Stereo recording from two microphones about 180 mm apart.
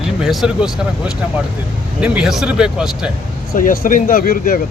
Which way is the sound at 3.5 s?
50° left (ahead or behind).